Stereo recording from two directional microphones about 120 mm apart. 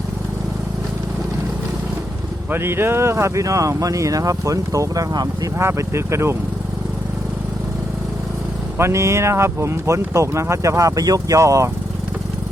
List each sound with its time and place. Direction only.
2.5 s speech: 20° right (ahead or behind)
8.8 s speech: 25° right (ahead or behind)